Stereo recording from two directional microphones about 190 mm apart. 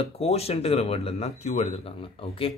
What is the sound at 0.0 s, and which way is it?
Speech, 30° left (ahead or behind).